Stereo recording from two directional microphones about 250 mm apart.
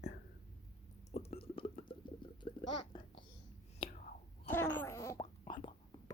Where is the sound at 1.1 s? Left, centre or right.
Left.